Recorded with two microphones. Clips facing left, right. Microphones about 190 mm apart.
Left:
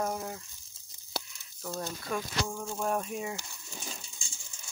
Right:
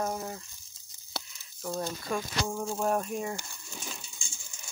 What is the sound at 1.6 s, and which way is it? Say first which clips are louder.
Speech: right 3 dB; 5° right (ahead or behind).